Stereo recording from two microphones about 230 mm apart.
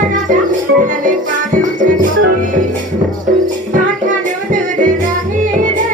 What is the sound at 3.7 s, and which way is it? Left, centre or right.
Music, right.